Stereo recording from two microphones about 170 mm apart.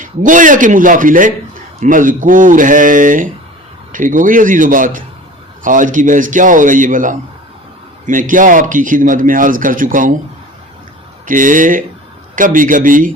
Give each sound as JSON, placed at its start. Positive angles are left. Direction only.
{"t": 0.0, "sound": "a man's voice", "side_deg": -50}
{"t": 11.3, "sound": "a man's voice", "side_deg": -50}